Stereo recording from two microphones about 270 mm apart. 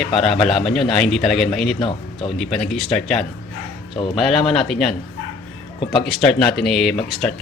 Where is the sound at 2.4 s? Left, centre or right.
Centre.